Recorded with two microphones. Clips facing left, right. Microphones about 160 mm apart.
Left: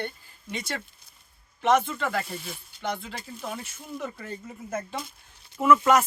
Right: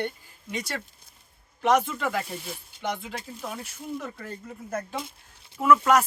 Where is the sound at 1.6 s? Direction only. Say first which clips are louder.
Even; 5° right (ahead or behind).